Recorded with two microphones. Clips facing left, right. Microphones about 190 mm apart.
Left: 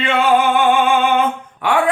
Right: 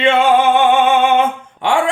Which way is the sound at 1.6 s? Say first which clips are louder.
Right 2 dB; 25° right (ahead or behind).